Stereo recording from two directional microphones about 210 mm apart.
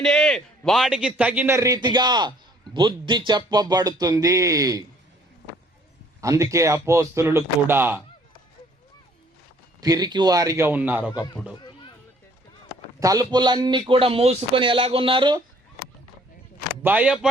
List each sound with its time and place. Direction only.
0.0 s a man's voice: 5° left (ahead or behind); by 4.8 s 15° right (ahead or behind)
6.2 s a man's voice: 15° right (ahead or behind)
9.8 s a man's voice: 20° right (ahead or behind)
11.6 s a sound: 25° left (ahead or behind)
13.0 s speech: 15° right (ahead or behind)
16.8 s a man's voice: 5° right (ahead or behind)